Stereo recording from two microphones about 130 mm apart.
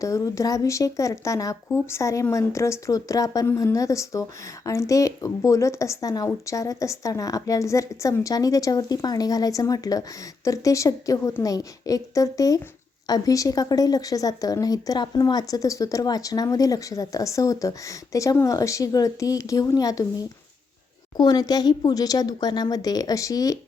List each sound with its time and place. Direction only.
0.0 s speech: 25° left (ahead or behind)